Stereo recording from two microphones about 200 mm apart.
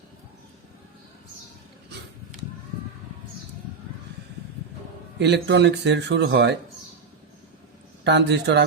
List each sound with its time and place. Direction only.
5.2 s speech: 60° right (ahead or behind)
8.0 s speech: 60° right (ahead or behind)